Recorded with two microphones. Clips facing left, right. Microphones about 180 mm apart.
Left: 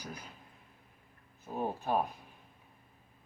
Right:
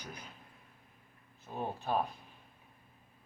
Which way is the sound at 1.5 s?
10° left (ahead or behind).